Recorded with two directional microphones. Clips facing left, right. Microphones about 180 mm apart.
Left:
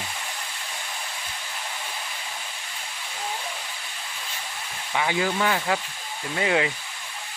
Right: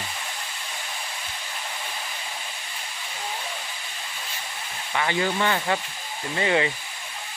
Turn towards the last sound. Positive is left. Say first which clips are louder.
# right 1 dB
turn(degrees=0)  # may be behind; listen again after turning